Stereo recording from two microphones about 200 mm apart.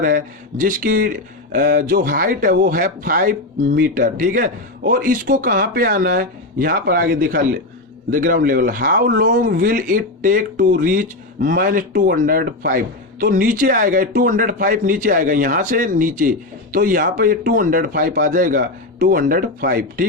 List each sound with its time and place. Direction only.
0.0 s speech: 40° right (ahead or behind)